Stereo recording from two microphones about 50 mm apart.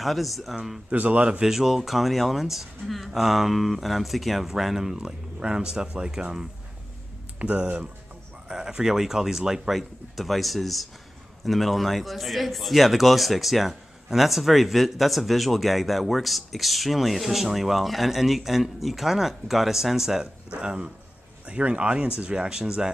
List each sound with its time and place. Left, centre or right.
0.0 s a man's voice: centre
0.8 s speech: right
1.4 s a man's voice: centre
7.3 s speech: right
8.5 s a man's voice: centre
20.4 s speech: right